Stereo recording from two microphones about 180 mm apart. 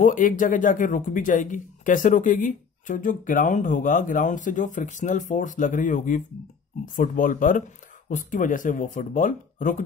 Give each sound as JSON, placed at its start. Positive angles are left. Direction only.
{"t": 0.0, "sound": "speech", "side_deg": 45}